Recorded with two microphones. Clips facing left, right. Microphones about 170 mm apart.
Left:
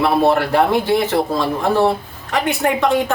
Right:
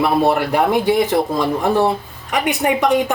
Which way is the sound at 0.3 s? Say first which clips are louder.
Left 1 dB; 15° right (ahead or behind).